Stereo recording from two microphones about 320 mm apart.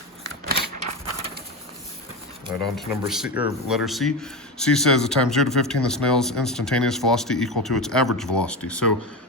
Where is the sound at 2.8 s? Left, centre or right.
Centre.